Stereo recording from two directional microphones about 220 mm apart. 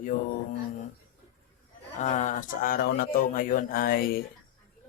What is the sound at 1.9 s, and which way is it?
Speech, 35° left (ahead or behind).